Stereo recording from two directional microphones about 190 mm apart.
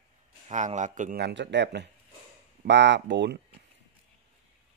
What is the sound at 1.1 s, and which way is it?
Speech, 65° right (ahead or behind).